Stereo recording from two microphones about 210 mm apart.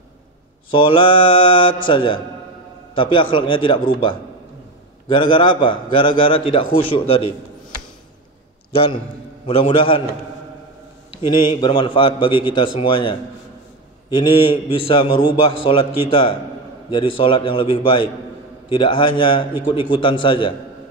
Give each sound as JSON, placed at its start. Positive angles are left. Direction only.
{"t": 0.7, "sound": "a man's voice", "side_deg": 25}
{"t": 9.5, "sound": "a man's voice", "side_deg": 25}
{"t": 11.1, "sound": "a man's voice", "side_deg": 25}
{"t": 14.4, "sound": "a man's voice", "side_deg": 25}